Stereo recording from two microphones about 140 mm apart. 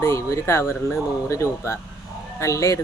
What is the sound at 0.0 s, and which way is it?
Speech, 20° left (ahead or behind).